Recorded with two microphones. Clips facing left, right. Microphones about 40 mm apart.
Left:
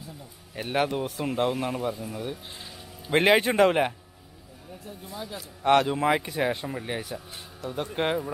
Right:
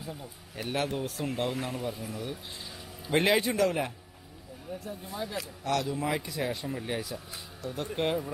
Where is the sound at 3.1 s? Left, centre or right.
Left.